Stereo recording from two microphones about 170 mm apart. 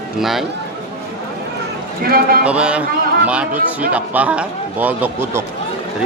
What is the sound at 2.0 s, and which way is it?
Speech, 60° right (ahead or behind).